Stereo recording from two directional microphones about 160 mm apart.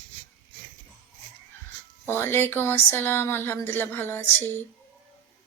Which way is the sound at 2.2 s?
15° left (ahead or behind).